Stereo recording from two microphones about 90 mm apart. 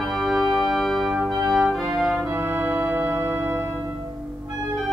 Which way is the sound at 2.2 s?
20° right (ahead or behind).